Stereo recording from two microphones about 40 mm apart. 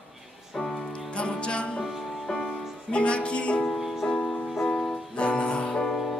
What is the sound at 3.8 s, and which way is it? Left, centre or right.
Music, centre.